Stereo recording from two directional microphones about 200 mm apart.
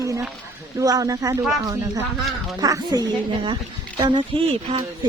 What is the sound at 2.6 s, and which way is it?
Speech, 20° right (ahead or behind).